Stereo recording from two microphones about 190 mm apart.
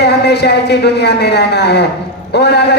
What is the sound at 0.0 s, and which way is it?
A man's voice, 60° left (ahead or behind).